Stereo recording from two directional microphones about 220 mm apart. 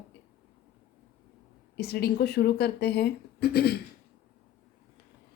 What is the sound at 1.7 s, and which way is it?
Speech, 45° left (ahead or behind).